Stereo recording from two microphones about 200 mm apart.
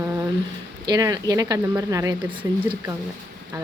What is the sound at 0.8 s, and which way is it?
Speech, 20° right (ahead or behind).